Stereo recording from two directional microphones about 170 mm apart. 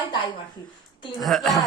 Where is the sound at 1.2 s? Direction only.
Centre (ahead or behind).